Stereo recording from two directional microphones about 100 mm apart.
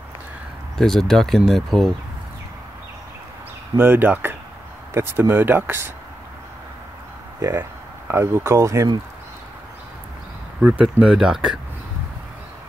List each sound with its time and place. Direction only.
0.7 s speech: 5° left (ahead or behind)
3.7 s speech: 20° right (ahead or behind)
7.3 s speech: 30° right (ahead or behind)
10.6 s speech: 10° right (ahead or behind)